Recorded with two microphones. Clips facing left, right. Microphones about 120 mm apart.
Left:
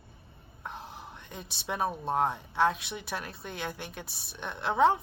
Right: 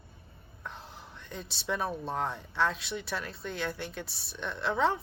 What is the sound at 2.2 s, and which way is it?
Speech, 15° left (ahead or behind).